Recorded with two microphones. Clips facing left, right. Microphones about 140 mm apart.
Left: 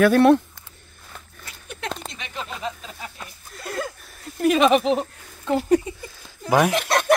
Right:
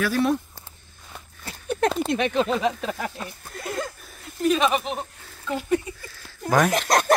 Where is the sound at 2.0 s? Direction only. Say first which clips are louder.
Right 12 dB; 60° right (ahead or behind); by 3.1 s 75° right (ahead or behind).